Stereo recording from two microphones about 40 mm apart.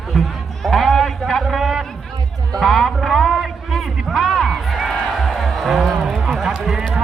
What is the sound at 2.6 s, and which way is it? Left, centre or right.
Speech, centre.